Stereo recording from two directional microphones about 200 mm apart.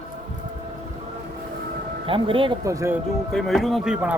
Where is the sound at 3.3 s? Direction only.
Centre (ahead or behind).